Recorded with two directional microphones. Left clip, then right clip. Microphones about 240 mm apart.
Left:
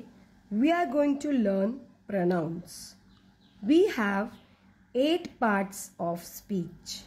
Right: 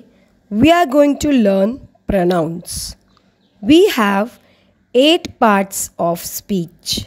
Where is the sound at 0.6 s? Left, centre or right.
Right.